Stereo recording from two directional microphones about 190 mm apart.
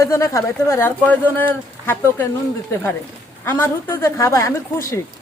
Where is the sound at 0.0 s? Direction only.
15° left (ahead or behind).